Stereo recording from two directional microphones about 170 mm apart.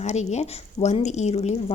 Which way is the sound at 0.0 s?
40° left (ahead or behind).